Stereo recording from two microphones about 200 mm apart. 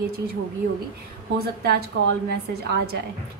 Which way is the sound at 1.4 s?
50° right (ahead or behind).